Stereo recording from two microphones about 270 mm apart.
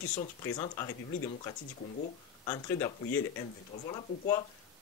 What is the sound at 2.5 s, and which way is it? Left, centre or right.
Speech, centre.